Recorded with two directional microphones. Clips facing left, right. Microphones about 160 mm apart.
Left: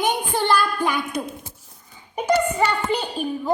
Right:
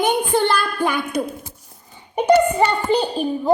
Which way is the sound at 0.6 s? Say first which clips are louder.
Right 1 dB; 55° right (ahead or behind).